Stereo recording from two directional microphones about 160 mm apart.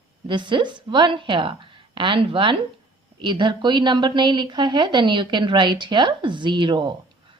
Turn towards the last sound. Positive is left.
turn(degrees=-30)  # may be behind; listen again after turning